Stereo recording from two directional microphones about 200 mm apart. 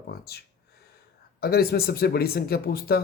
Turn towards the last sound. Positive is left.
turn(degrees=50)  # may be behind; listen again after turning